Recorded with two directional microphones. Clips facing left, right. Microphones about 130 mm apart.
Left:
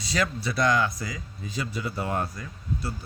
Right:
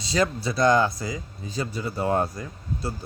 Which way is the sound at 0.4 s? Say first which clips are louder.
Right 4 dB; 30° right (ahead or behind).